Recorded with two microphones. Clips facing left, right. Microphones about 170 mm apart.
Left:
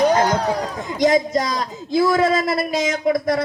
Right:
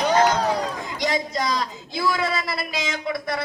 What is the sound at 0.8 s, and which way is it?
A man's voice, 45° left (ahead or behind).